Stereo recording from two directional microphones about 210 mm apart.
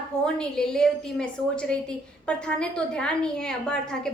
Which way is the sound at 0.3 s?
5° left (ahead or behind).